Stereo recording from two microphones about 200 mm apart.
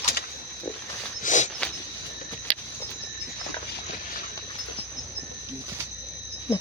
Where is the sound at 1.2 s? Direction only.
40° left (ahead or behind).